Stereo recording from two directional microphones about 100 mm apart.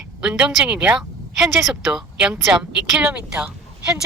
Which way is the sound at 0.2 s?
5° right (ahead or behind).